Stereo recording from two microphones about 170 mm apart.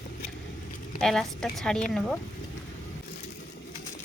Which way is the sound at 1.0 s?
Centre (ahead or behind).